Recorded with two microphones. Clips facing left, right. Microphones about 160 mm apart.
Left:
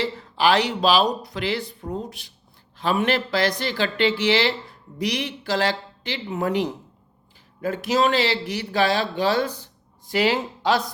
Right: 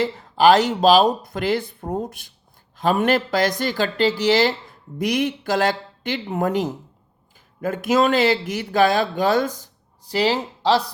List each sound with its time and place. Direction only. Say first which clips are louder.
0.0 s speech: right 5 dB; 45° right (ahead or behind)